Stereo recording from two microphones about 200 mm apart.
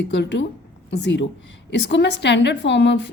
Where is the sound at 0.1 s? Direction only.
60° left (ahead or behind).